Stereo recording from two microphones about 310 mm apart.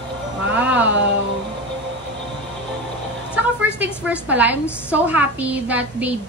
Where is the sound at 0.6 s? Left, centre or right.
Centre.